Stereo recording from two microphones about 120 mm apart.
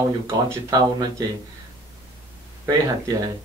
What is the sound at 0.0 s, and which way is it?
Speech, 25° right (ahead or behind).